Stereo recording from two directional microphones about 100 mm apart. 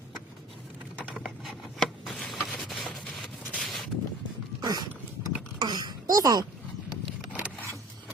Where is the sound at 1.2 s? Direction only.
Centre (ahead or behind).